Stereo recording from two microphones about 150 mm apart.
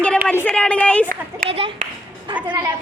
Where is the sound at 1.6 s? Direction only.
40° right (ahead or behind).